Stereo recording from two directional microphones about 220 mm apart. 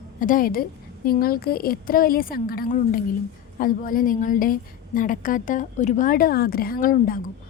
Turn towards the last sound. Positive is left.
turn(degrees=40)  # may be behind; listen again after turning